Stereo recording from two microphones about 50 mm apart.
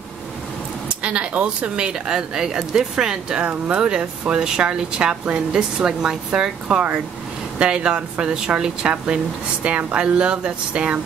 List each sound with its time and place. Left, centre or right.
1.0 s speech: right
3.4 s speech: right
3.8 s speech: centre